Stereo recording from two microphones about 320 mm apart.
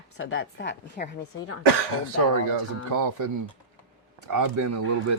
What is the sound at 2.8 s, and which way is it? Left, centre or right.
Speech, right.